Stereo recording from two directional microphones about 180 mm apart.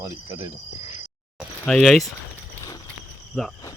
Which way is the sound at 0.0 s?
15° right (ahead or behind).